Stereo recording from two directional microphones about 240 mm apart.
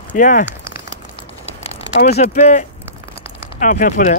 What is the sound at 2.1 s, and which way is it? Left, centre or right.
Speech, left.